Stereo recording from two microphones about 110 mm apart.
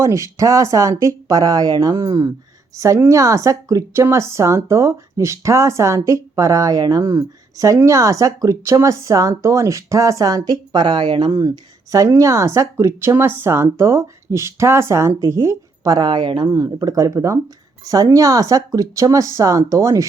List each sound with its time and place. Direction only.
0.0 s a woman's voice: 30° right (ahead or behind); by 11.3 s 50° right (ahead or behind)
11.3 s a woman's voice: 35° right (ahead or behind)
16.5 s speech: 35° right (ahead or behind)